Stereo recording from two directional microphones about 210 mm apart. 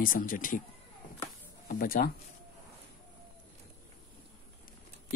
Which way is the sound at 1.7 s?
40° left (ahead or behind).